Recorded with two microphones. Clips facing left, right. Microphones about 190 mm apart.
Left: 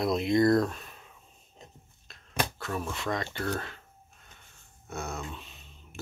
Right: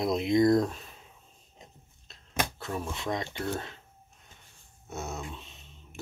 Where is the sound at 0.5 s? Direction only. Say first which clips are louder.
Even; 15° right (ahead or behind).